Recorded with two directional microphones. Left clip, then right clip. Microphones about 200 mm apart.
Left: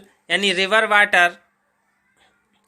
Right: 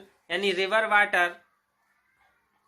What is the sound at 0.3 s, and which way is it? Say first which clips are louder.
Speech: left 8 dB; 45° left (ahead or behind).